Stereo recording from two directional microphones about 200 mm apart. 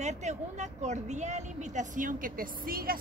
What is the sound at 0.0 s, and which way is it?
Speech, 35° right (ahead or behind).